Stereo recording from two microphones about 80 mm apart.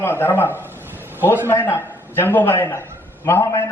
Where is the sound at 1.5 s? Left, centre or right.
Left.